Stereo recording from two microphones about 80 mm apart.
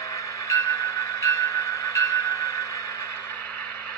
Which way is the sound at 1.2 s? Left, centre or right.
Left.